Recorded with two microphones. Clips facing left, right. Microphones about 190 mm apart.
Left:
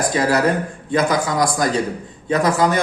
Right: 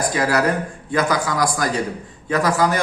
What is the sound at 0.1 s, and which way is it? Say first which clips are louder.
A man's voice: left 3 dB; 25° left (ahead or behind).